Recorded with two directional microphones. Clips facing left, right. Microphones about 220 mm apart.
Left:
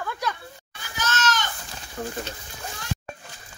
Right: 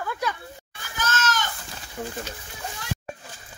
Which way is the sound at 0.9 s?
50° right (ahead or behind).